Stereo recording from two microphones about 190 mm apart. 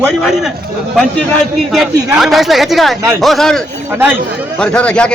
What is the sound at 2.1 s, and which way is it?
A man's voice, centre (ahead or behind).